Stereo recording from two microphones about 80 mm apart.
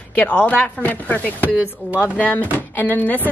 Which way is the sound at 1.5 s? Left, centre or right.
Centre.